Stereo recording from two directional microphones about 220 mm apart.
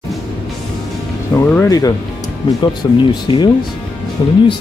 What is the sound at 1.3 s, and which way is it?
Speech, 10° left (ahead or behind).